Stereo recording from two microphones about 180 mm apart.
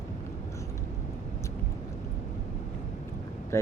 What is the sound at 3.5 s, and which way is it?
Speech, 15° left (ahead or behind).